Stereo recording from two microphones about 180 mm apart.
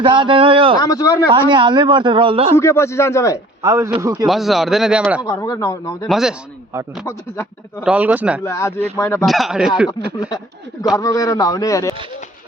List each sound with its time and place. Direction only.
0.0 s speech: 25° right (ahead or behind)
0.8 s a man's voice: 20° left (ahead or behind)
1.3 s a man's voice: 25° right (ahead or behind)
2.6 s a man's voice: 15° left (ahead or behind)
3.6 s speech: 15° right (ahead or behind)
4.3 s speech: centre (ahead or behind)
5.2 s a man's voice: 20° left (ahead or behind)
6.1 s speech: centre (ahead or behind)
6.7 s speech: 15° right (ahead or behind)
7.1 s a man's voice: 15° left (ahead or behind)
7.9 s speech: 10° right (ahead or behind)
8.4 s a man's voice: 15° left (ahead or behind)
9.2 s speech: centre (ahead or behind)
10.2 s a man's voice: 20° left (ahead or behind)